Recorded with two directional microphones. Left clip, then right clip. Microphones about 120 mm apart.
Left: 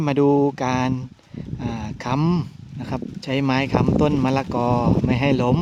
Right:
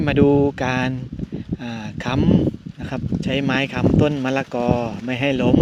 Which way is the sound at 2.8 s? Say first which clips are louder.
Right 2 dB; 10° left (ahead or behind).